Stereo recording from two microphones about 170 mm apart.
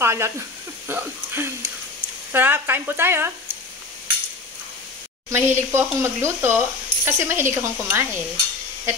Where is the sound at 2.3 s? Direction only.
10° right (ahead or behind).